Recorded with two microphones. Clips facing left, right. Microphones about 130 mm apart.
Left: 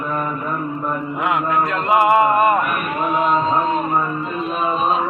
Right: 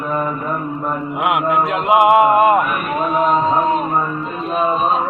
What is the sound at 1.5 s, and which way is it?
A man's voice, 20° right (ahead or behind).